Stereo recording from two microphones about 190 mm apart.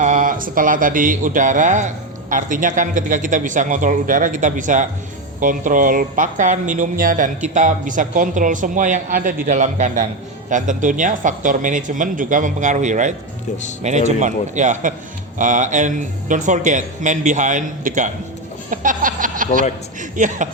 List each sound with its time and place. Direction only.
0.0 s speech: 40° right (ahead or behind)
18.7 s snicker: 45° right (ahead or behind)
20.0 s speech: 40° right (ahead or behind)